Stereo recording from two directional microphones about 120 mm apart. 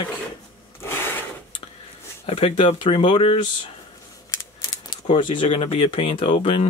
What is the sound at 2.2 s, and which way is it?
Speech, 55° left (ahead or behind).